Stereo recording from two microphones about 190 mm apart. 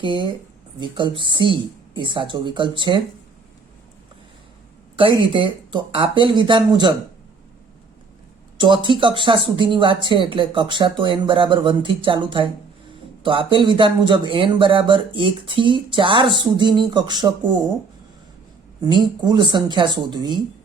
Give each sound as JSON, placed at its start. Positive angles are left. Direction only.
{"t": 0.0, "sound": "speech", "side_deg": -25}
{"t": 5.3, "sound": "speech", "side_deg": -25}
{"t": 8.5, "sound": "speech", "side_deg": -25}
{"t": 18.9, "sound": "speech", "side_deg": -25}